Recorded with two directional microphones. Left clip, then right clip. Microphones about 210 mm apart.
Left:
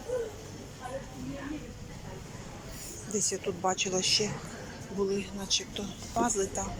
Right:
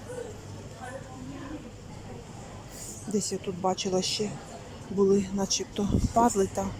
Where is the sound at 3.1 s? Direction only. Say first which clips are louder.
Right 1 dB; 20° right (ahead or behind).